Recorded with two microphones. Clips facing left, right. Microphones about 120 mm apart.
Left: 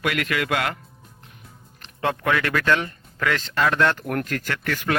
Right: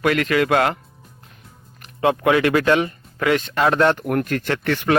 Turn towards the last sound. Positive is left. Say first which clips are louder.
# right 6 dB
turn(degrees=-25)  # may be behind; listen again after turning